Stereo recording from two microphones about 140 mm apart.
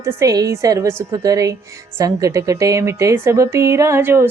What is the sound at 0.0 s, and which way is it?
Speech, 20° right (ahead or behind).